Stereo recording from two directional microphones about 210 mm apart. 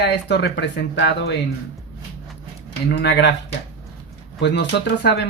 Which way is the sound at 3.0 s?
55° left (ahead or behind).